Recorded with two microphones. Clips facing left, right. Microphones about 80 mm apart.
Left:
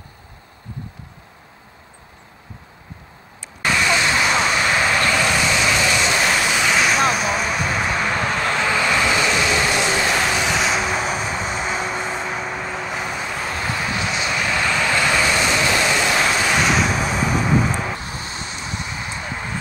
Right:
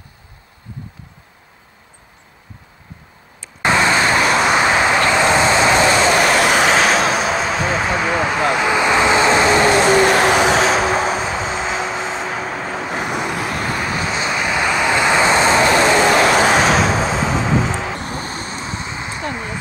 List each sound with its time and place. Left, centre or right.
3.6 s vehicle: right
4.6 s vehicle: right
6.7 s vehicle: right
10.6 s vehicle: right
13.1 s vehicle: right
13.7 s vehicle: right
14.4 s vehicle: centre; by 16.5 s right
16.5 s vehicle: right
17.9 s vehicle: right
19.3 s a sound: centre